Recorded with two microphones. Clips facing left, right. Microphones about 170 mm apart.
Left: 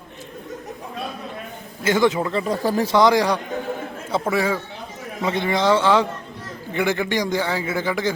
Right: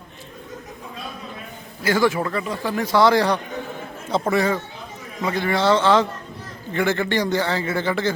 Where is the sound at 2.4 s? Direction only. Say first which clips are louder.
Left 4 dB; 40° left (ahead or behind).